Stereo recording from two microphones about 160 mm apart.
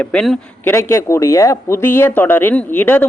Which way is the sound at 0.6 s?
15° left (ahead or behind).